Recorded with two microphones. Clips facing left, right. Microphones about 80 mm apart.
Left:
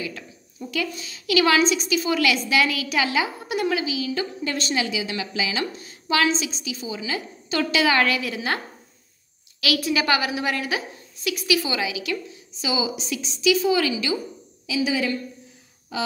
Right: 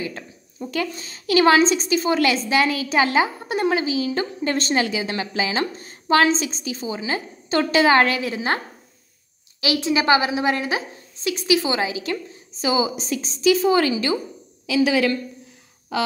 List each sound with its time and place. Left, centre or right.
0.0 s a woman's voice: right
9.6 s a woman's voice: right
14.7 s a woman's voice: right